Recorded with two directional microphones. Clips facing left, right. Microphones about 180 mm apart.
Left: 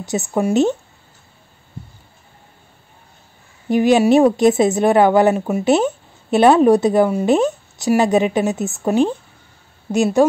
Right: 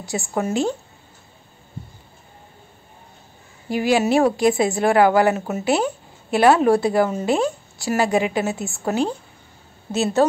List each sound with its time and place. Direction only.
0.0 s speech: 20° left (ahead or behind)
3.6 s speech: 20° left (ahead or behind)